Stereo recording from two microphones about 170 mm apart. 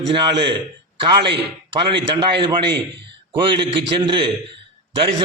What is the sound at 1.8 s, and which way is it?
A man's voice, 30° right (ahead or behind).